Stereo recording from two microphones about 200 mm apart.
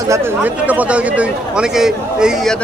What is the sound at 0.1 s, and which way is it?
Speech, 10° right (ahead or behind).